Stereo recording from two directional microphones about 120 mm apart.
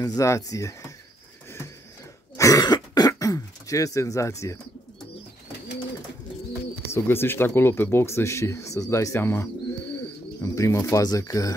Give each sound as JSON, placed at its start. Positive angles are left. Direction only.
{"t": 0.0, "sound": "speech", "side_deg": 30}
{"t": 2.3, "sound": "throat clearing", "side_deg": 30}
{"t": 6.9, "sound": "speech", "side_deg": 20}